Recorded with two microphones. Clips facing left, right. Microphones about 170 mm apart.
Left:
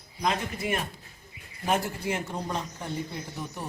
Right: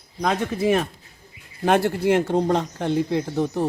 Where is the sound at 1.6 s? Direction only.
75° right (ahead or behind).